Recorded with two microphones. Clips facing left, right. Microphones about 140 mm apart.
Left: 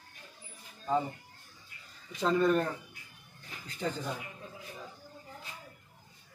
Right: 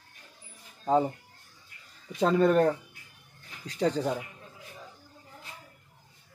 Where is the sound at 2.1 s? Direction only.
60° right (ahead or behind).